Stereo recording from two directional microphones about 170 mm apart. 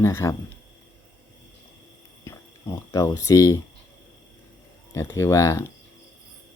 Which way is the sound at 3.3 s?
20° left (ahead or behind).